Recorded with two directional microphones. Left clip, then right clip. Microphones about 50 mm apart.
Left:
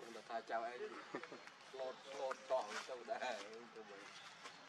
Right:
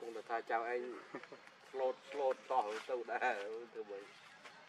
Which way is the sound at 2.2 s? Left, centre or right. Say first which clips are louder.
Right 6 dB; right.